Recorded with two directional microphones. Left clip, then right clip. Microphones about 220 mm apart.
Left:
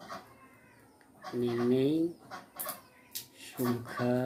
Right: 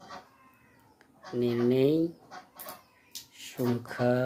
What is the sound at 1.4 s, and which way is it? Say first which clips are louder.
Speech: right 3 dB; 35° right (ahead or behind).